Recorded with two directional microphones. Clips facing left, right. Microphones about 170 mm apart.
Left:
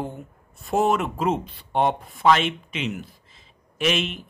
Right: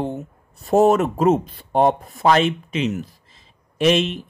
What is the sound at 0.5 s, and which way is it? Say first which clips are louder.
Speech: right 7 dB; 40° right (ahead or behind).